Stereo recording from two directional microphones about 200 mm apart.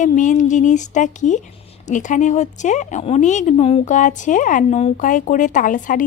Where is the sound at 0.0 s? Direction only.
40° left (ahead or behind).